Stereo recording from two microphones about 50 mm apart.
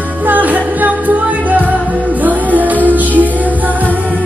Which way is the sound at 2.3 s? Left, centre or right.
Right.